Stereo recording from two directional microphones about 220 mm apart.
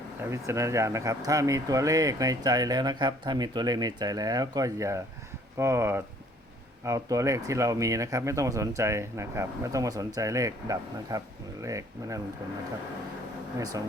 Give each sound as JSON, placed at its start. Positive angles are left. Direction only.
{"t": 0.3, "sound": "speech", "side_deg": -15}
{"t": 13.6, "sound": "speech", "side_deg": -15}